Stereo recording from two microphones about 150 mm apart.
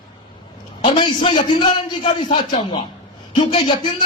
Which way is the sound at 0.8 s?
30° left (ahead or behind).